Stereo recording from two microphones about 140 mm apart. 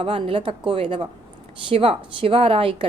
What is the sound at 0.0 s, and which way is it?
A woman's voice, 40° right (ahead or behind).